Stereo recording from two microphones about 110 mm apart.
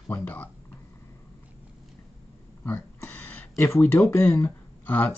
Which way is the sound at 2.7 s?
20° left (ahead or behind).